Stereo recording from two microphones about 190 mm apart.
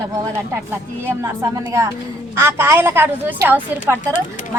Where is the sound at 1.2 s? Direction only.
15° right (ahead or behind).